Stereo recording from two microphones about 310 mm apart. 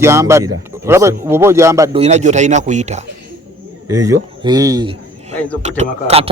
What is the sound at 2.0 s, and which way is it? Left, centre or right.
Speech, right.